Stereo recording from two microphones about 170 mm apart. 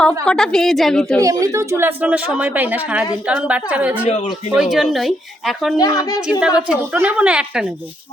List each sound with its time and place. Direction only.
0.3 s speech: 5° left (ahead or behind)
1.2 s speech: 20° right (ahead or behind); by 5.7 s centre (ahead or behind)
5.7 s a woman's voice: 20° left (ahead or behind)
6.6 s speech: 10° right (ahead or behind)